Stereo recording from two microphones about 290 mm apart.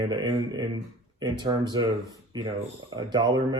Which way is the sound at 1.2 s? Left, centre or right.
Centre.